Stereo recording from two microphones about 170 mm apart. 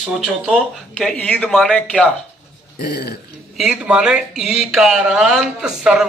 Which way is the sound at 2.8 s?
75° left (ahead or behind).